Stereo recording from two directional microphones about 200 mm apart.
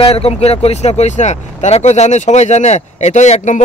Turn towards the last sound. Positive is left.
turn(degrees=35)  # may be behind; listen again after turning